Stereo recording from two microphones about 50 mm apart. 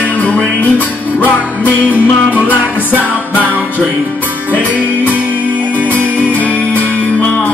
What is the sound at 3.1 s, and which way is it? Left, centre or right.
Music, left.